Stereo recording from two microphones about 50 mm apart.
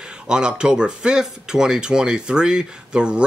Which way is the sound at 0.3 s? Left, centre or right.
Centre.